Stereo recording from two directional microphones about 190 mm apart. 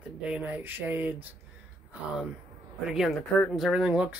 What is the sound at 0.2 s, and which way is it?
Speech, 5° right (ahead or behind).